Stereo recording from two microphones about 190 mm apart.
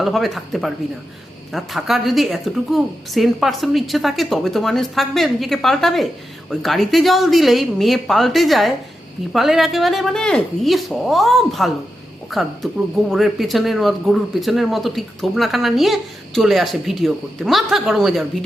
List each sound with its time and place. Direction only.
0.0 s speech: centre (ahead or behind)